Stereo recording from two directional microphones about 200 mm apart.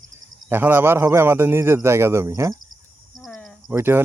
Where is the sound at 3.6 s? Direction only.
10° right (ahead or behind).